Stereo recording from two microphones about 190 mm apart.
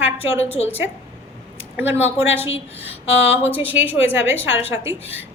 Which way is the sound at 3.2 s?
10° right (ahead or behind).